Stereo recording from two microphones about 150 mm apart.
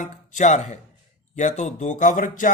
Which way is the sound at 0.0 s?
55° left (ahead or behind).